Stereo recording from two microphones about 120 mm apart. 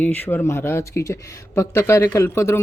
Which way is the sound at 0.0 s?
15° left (ahead or behind).